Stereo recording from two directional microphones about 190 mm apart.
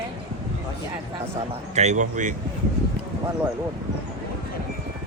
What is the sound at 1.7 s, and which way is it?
Speech, 35° right (ahead or behind).